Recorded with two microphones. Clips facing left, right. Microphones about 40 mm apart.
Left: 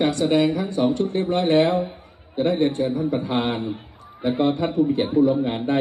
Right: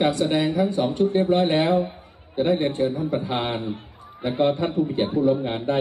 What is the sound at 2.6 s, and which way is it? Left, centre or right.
Speech, right.